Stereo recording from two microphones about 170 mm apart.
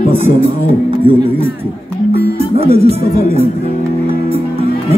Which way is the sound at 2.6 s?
35° right (ahead or behind).